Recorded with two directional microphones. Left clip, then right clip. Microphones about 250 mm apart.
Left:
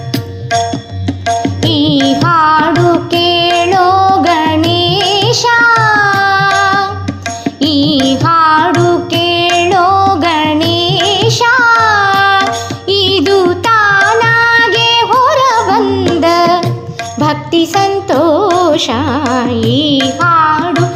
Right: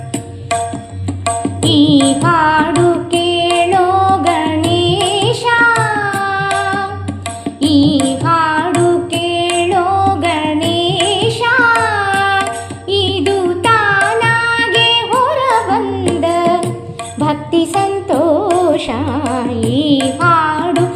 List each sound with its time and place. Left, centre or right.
1.3 s music: left